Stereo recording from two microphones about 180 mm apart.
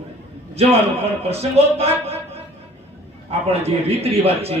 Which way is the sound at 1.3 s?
35° right (ahead or behind).